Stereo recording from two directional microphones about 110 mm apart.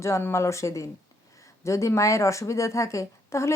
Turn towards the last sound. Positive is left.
turn(degrees=25)  # may be behind; listen again after turning